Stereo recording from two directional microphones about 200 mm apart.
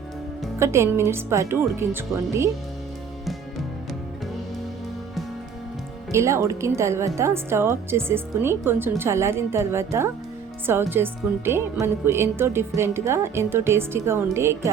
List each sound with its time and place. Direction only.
0.6 s speech: 15° right (ahead or behind)
6.1 s speech: 15° right (ahead or behind)